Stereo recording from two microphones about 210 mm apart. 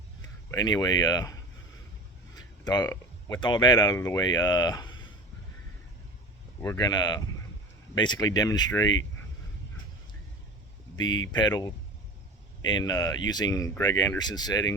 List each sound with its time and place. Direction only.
0.5 s speech: 20° left (ahead or behind)
6.6 s speech: 15° left (ahead or behind)
11.3 s speech: 20° left (ahead or behind)